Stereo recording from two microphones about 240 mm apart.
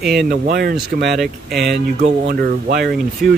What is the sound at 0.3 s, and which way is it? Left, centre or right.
Speech, right.